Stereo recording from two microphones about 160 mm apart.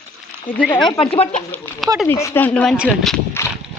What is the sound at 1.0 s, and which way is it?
Speech, 35° left (ahead or behind).